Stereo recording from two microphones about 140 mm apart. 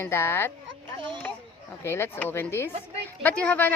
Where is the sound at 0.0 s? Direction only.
15° left (ahead or behind).